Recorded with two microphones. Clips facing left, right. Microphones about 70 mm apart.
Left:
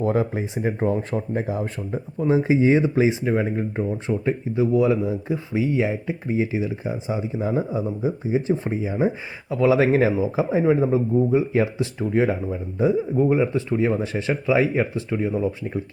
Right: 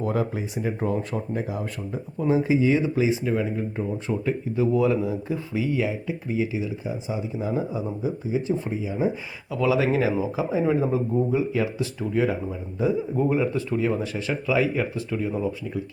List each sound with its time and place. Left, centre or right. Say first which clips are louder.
0.0 s speech: left 4 dB; left
4.5 s speech: left 2 dB; centre
5.9 s speech: left 3 dB; left